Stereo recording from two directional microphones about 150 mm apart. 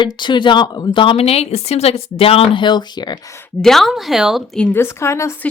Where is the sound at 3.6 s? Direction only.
Centre (ahead or behind); by 5.4 s 20° left (ahead or behind).